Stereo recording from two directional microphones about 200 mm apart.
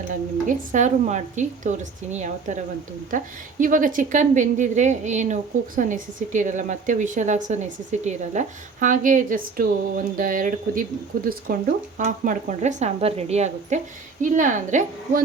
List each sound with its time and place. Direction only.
0.1 s a woman's voice: 40° right (ahead or behind)
3.6 s a woman's voice: 40° right (ahead or behind)